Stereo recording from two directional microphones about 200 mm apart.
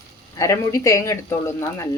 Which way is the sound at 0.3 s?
15° left (ahead or behind).